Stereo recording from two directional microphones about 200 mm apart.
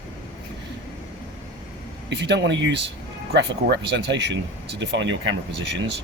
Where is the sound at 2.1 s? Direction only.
60° right (ahead or behind).